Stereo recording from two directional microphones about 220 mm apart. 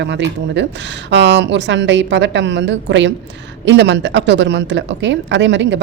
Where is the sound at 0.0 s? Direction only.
55° right (ahead or behind).